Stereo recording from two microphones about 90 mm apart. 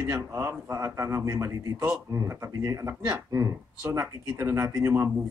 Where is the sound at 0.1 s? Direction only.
30° right (ahead or behind).